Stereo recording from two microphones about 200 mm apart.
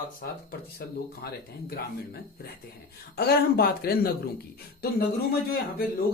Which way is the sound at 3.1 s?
50° left (ahead or behind).